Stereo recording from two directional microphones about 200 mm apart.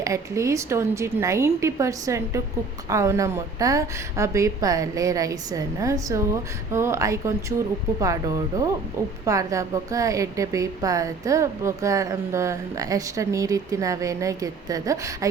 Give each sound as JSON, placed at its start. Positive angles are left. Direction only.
{"t": 0.0, "sound": "a woman's voice", "side_deg": -15}